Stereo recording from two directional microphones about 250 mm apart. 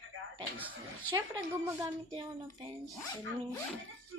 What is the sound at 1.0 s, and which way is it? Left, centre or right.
Music, centre.